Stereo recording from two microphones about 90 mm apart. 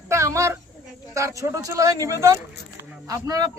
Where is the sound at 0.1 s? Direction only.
35° right (ahead or behind).